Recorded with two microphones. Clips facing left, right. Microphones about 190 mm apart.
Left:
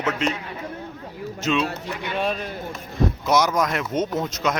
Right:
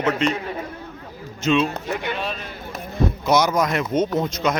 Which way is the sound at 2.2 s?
50° left (ahead or behind).